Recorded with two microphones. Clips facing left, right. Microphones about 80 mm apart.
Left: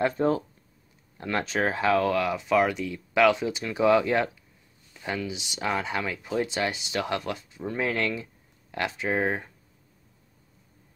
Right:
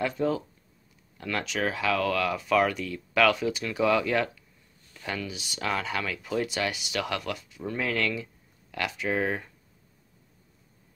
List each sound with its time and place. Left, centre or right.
0.0 s speech: left